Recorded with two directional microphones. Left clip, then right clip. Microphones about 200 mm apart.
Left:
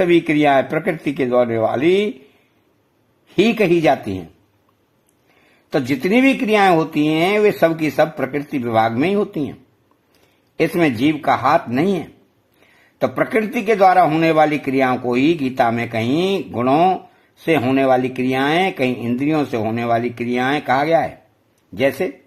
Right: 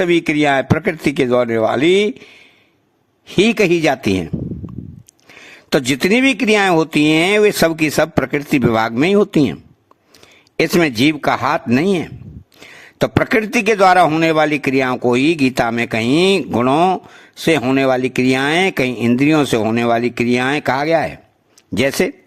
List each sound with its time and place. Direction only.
0.0 s speech: 30° right (ahead or behind)
5.7 s speech: 40° right (ahead or behind)
10.6 s speech: 30° right (ahead or behind)